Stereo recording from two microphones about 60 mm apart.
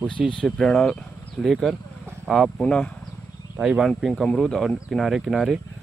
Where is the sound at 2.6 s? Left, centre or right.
Centre.